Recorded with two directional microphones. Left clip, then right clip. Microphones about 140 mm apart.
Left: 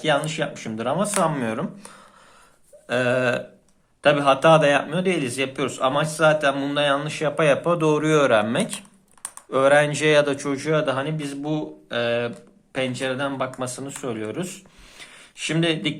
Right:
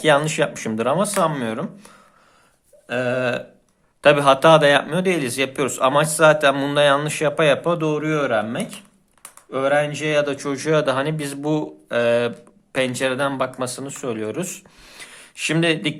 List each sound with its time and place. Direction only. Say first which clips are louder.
0.0 s speech: right 5 dB; 45° right (ahead or behind)
0.9 s a man's voice: right 2 dB; 20° right (ahead or behind)
1.5 s burping: right 1 dB; centre (ahead or behind)
4.0 s a man's voice: right 3 dB; 30° right (ahead or behind); by 7.8 s 15° right (ahead or behind)
7.8 s burping: left 2 dB; centre (ahead or behind)
8.3 s speech: left 2 dB; 10° left (ahead or behind)
10.5 s speech: right 3 dB; 20° right (ahead or behind); by 13.5 s 40° right (ahead or behind)
13.6 s a man's voice: right 3 dB; 20° right (ahead or behind)